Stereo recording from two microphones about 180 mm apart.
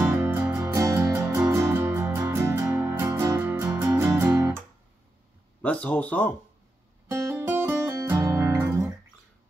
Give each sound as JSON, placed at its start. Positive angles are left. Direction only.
{"t": 0.0, "sound": "music", "side_deg": -15}
{"t": 5.6, "sound": "speech", "side_deg": 10}
{"t": 7.1, "sound": "music", "side_deg": -15}